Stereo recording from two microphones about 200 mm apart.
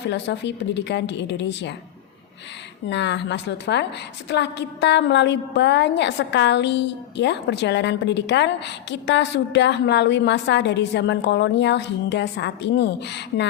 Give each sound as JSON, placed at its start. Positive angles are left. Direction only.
{"t": 0.0, "sound": "a woman's voice", "side_deg": 60}
{"t": 2.9, "sound": "a woman's voice", "side_deg": 60}